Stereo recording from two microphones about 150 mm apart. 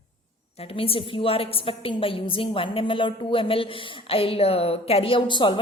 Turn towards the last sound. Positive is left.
turn(degrees=30)  # may be behind; listen again after turning